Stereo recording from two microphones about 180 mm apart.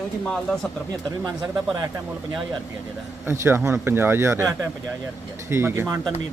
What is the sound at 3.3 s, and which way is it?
Speech, 15° right (ahead or behind).